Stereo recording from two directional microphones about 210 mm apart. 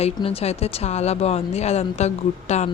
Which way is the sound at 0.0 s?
30° left (ahead or behind).